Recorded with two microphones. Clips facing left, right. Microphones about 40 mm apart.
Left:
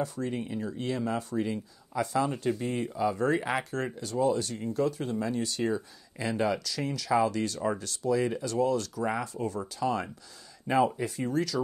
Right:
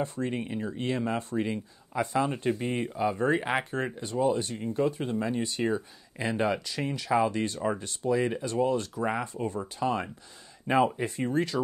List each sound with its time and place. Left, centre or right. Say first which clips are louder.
0.0 s speech: right 1 dB; right